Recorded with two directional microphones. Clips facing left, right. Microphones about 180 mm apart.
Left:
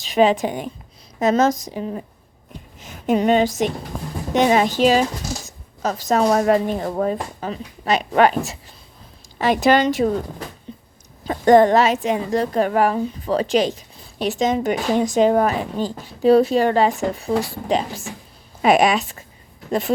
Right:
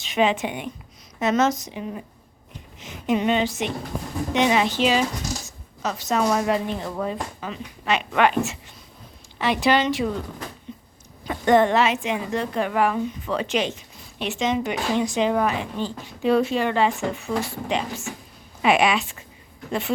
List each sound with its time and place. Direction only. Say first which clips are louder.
0.0 s a woman's voice: left 5 dB; 40° left (ahead or behind)
10.7 s a sound: left 1 dB; 30° left (ahead or behind)
11.2 s a woman's voice: left 5 dB; 40° left (ahead or behind)